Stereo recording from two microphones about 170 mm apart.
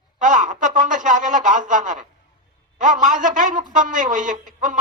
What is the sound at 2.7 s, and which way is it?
A woman's voice, 50° right (ahead or behind).